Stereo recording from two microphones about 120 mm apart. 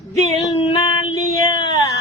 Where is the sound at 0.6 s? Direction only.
45° left (ahead or behind).